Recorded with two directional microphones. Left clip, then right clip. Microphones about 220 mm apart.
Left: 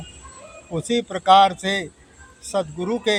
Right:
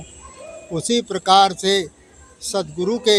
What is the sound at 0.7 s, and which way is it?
Speech, 35° right (ahead or behind).